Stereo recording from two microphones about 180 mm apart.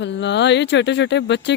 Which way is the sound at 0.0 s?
80° left.